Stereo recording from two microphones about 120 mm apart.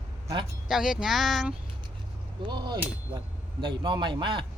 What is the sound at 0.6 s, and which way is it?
Speech, 5° right (ahead or behind).